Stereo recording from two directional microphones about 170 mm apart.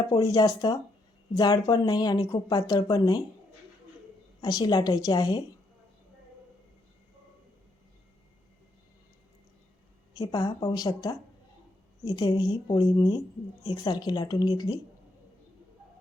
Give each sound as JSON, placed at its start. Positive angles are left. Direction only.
{"t": 0.1, "sound": "speech", "side_deg": 20}
{"t": 4.4, "sound": "speech", "side_deg": 20}
{"t": 10.2, "sound": "speech", "side_deg": 20}